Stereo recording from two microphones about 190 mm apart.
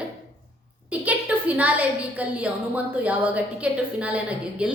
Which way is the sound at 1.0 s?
10° right (ahead or behind).